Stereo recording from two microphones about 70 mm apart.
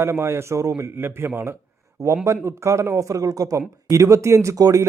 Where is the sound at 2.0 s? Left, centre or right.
Right.